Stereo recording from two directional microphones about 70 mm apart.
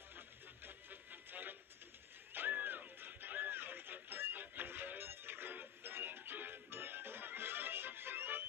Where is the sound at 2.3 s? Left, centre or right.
Right.